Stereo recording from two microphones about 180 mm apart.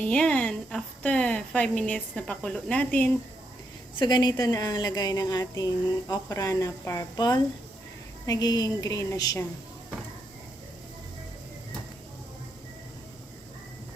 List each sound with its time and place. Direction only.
0.0 s a woman's voice: 5° left (ahead or behind)
3.9 s a woman's voice: 25° left (ahead or behind)